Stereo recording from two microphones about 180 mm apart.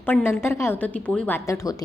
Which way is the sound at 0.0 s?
10° left (ahead or behind).